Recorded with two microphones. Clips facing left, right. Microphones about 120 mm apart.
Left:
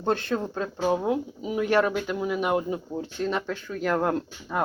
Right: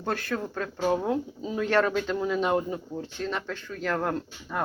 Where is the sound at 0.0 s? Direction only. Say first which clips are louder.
Left 4 dB; 25° left (ahead or behind).